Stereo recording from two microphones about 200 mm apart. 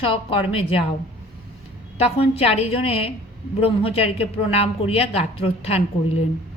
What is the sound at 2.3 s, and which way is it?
A woman's voice, 30° left (ahead or behind).